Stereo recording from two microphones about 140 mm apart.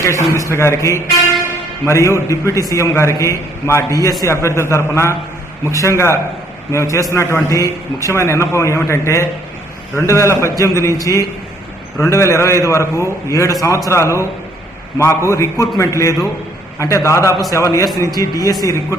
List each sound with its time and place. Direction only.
0.0 s a man's voice: 20° left (ahead or behind)
16.7 s a man's voice: 20° left (ahead or behind)